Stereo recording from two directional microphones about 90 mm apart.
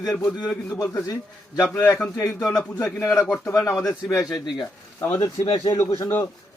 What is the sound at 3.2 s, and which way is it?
Speech, 20° left (ahead or behind).